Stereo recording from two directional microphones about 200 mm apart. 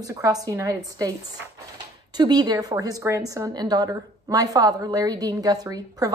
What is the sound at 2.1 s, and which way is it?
A woman's voice, 20° right (ahead or behind).